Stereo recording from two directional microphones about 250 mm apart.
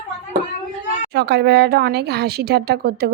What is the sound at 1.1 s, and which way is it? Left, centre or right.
Speech, right.